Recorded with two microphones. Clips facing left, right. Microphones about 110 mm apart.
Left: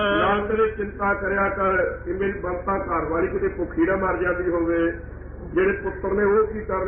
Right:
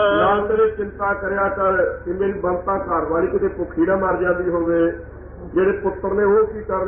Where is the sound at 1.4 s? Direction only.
25° right (ahead or behind).